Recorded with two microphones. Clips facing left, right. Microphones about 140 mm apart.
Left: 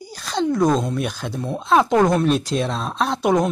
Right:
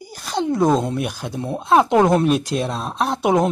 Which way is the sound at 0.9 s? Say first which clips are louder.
Even; 10° right (ahead or behind).